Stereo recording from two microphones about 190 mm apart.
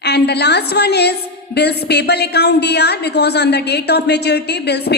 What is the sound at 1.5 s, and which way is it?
A woman's voice, 60° left (ahead or behind).